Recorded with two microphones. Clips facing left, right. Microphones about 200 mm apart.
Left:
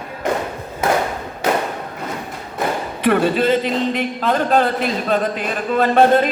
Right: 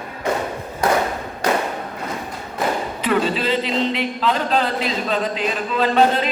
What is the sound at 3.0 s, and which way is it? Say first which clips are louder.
A man's voice: left 5 dB; 55° left (ahead or behind).